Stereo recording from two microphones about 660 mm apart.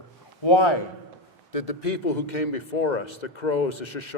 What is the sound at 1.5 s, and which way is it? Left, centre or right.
A man's voice, left.